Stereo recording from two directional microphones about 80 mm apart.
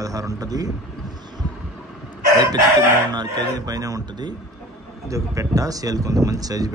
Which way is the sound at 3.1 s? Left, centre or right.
Right.